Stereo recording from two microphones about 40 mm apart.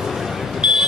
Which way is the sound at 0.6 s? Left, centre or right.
Centre.